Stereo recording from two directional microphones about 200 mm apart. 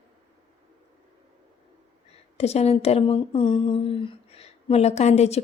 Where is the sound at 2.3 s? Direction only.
30° left (ahead or behind).